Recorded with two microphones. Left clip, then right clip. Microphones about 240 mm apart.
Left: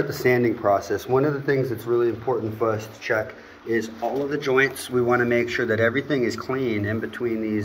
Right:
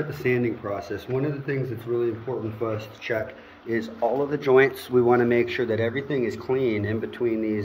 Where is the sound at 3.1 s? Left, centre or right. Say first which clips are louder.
Left 4 dB; centre.